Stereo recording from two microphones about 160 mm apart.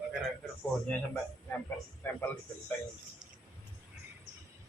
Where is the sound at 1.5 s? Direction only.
10° left (ahead or behind).